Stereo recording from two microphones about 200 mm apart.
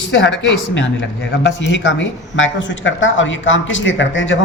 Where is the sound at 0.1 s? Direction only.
65° left (ahead or behind).